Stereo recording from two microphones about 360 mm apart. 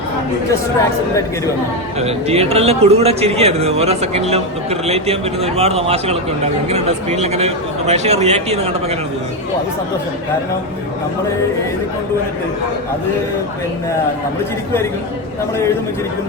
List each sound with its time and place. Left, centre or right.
2.0 s speech: centre